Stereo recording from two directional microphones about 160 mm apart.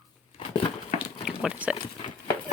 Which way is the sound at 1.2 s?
5° right (ahead or behind).